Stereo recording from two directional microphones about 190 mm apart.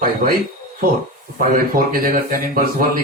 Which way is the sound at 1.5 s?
45° right (ahead or behind).